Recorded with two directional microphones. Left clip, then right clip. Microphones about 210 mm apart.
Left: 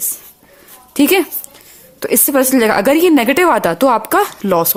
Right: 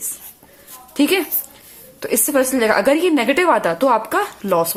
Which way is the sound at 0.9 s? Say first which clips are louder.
Left 5 dB; 40° left (ahead or behind).